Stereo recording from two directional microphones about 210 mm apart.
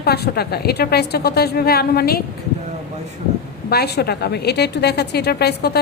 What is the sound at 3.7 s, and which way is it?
A woman's voice, 50° left (ahead or behind).